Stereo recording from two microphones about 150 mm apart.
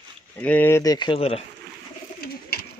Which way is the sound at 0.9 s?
30° left (ahead or behind).